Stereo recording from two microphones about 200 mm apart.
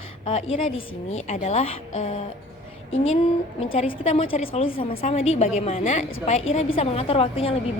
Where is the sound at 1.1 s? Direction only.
35° left (ahead or behind).